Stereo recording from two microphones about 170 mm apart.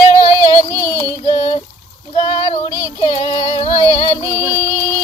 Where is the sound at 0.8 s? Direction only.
15° left (ahead or behind).